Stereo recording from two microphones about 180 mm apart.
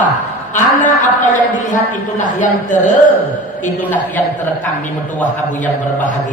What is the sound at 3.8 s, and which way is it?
Speech, 10° left (ahead or behind).